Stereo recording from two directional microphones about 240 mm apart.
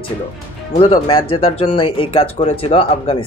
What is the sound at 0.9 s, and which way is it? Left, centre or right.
Speech, left.